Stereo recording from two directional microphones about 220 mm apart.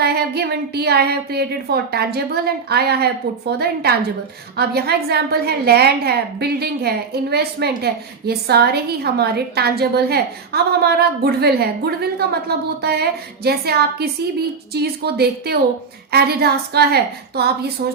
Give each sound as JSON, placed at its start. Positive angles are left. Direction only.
{"t": 0.0, "sound": "a woman's voice", "side_deg": -45}